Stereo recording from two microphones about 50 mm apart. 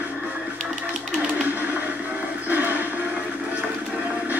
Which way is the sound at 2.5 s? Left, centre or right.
Right.